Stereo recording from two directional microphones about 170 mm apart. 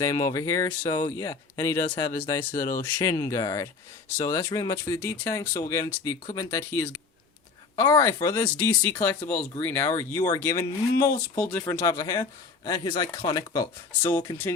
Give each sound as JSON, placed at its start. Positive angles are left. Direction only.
{"t": 0.0, "sound": "speech", "side_deg": 20}
{"t": 2.5, "sound": "speech", "side_deg": 55}
{"t": 3.1, "sound": "speech", "side_deg": 15}